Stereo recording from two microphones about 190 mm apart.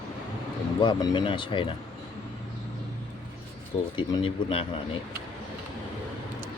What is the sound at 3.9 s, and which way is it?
Speech, 25° left (ahead or behind).